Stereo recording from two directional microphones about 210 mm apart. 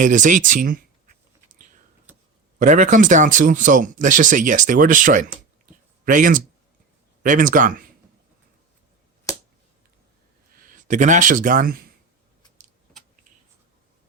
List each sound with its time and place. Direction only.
0.0 s speech: 35° right (ahead or behind)
1.5 s whispering: 40° right (ahead or behind)
2.6 s speech: 35° right (ahead or behind)
9.3 s finger snapping: 15° left (ahead or behind)
10.8 s speech: 35° right (ahead or behind)